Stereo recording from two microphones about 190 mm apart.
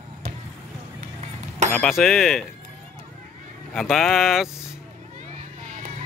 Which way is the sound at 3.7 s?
Centre (ahead or behind).